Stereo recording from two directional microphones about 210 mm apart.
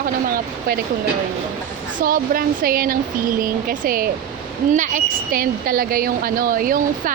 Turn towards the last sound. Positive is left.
turn(degrees=-40)  # may be behind; listen again after turning